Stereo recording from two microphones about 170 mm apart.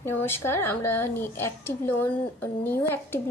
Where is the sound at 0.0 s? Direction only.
15° left (ahead or behind).